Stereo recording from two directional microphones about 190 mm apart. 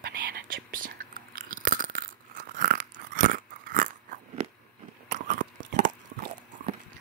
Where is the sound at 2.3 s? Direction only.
50° right (ahead or behind).